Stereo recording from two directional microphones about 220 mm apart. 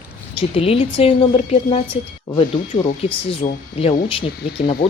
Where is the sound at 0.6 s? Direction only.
25° left (ahead or behind).